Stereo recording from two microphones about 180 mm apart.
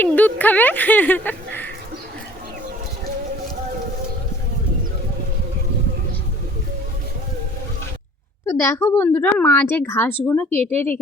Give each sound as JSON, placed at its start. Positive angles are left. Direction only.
{"t": 0.0, "sound": "speech", "side_deg": 10}
{"t": 8.4, "sound": "a woman's voice", "side_deg": 15}
{"t": 10.5, "sound": "speech", "side_deg": -35}